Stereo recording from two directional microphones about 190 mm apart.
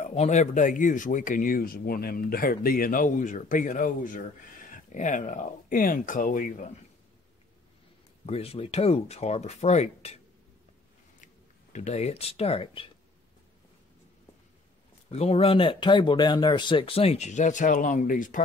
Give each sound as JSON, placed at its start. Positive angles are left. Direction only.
{"t": 0.0, "sound": "speech", "side_deg": 35}
{"t": 8.3, "sound": "speech", "side_deg": 30}
{"t": 11.7, "sound": "speech", "side_deg": 35}
{"t": 15.0, "sound": "speech", "side_deg": 35}